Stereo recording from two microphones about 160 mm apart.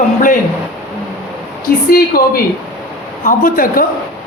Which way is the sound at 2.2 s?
70° left (ahead or behind).